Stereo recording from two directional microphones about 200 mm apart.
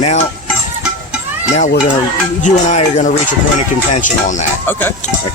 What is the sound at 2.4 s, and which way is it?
Speech, 40° left (ahead or behind).